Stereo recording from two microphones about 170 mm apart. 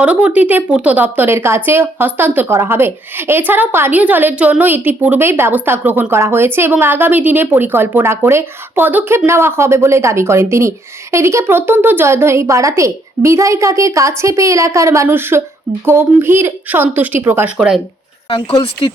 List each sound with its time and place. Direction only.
0.0 s speech: 5° right (ahead or behind)
18.3 s speech: 30° left (ahead or behind)